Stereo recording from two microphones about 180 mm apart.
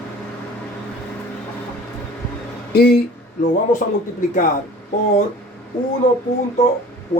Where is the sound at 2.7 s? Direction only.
60° left (ahead or behind).